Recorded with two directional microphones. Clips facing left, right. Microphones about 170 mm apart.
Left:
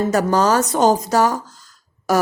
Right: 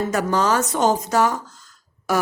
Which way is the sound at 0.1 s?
40° left (ahead or behind).